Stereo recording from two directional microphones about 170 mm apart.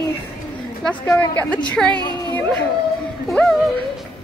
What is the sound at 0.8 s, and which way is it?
A woman's voice, 5° left (ahead or behind).